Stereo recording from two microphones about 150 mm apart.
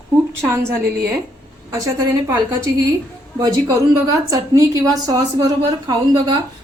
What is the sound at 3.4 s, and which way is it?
A woman's voice, 25° right (ahead or behind).